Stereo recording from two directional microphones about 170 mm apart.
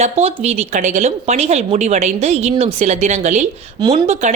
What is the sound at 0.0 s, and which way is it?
A woman's voice, 40° right (ahead or behind).